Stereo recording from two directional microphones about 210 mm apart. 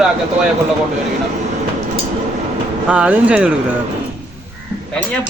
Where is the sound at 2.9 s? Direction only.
5° right (ahead or behind).